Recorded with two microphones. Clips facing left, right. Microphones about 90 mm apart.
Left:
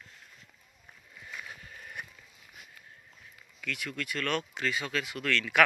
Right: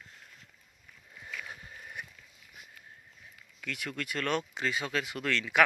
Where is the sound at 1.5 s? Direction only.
25° right (ahead or behind).